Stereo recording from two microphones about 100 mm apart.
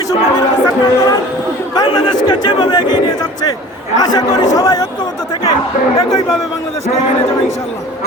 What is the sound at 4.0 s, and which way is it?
Speech, 40° left (ahead or behind).